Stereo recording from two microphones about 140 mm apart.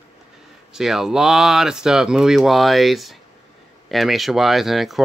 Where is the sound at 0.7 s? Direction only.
5° right (ahead or behind).